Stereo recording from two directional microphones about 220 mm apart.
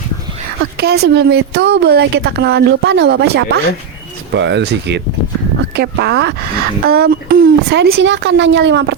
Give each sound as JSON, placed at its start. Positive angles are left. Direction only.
{"t": 0.8, "sound": "speech", "side_deg": -45}